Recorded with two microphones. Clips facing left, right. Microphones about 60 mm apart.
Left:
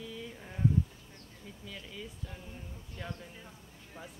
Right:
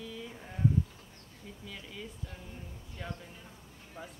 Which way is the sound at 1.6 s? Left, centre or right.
Centre.